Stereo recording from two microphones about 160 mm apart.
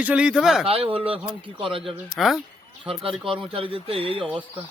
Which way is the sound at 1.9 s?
Centre (ahead or behind).